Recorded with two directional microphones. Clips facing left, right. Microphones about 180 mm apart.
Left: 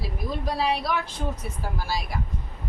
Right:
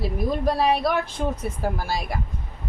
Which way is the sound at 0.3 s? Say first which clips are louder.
Right 5 dB; 50° right (ahead or behind).